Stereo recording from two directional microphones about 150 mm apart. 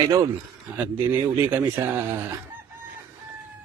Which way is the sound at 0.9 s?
15° right (ahead or behind).